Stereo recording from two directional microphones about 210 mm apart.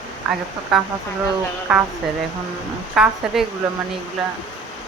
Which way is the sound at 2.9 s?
5° right (ahead or behind).